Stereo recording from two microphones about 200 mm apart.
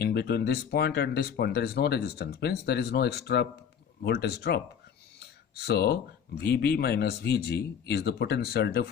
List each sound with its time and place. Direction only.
0.0 s speech: 55° left (ahead or behind)